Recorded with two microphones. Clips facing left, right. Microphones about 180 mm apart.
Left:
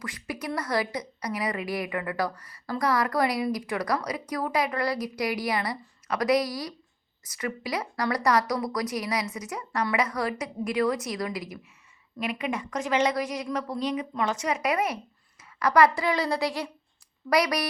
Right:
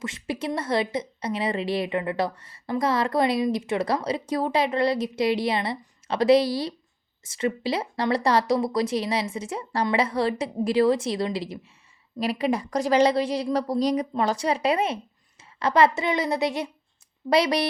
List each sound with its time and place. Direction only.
0.0 s a woman's voice: 25° right (ahead or behind)